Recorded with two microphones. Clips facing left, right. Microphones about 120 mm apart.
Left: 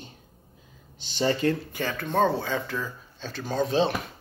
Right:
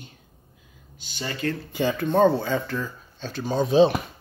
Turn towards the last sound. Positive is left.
turn(degrees=-15)  # may be behind; listen again after turning